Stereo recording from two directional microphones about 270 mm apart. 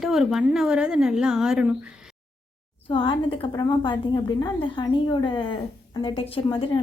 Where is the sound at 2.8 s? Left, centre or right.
Centre.